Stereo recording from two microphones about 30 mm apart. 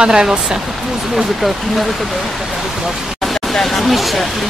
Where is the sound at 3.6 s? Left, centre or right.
Centre.